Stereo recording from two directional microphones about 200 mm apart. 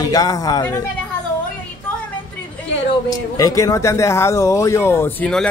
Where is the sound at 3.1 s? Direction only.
15° left (ahead or behind).